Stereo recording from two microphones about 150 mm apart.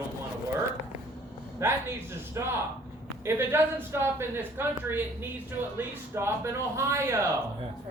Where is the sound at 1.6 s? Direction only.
20° right (ahead or behind).